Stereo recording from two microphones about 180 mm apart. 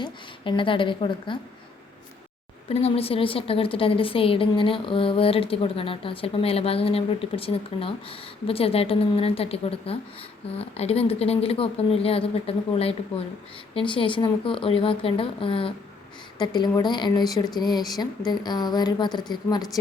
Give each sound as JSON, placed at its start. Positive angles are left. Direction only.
{"t": 0.0, "sound": "a woman's voice", "side_deg": 25}
{"t": 2.6, "sound": "a woman's voice", "side_deg": 35}